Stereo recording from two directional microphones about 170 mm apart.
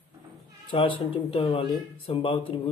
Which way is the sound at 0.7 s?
30° left (ahead or behind).